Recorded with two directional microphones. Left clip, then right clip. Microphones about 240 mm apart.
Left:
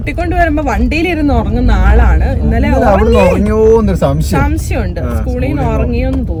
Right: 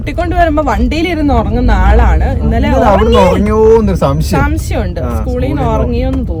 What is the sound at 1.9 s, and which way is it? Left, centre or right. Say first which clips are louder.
Speech: right 2 dB; centre.